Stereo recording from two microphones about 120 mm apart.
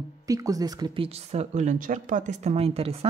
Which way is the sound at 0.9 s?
55° right (ahead or behind).